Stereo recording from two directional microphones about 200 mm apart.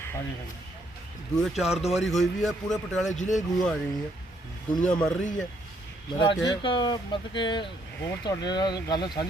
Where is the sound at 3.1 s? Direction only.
35° left (ahead or behind).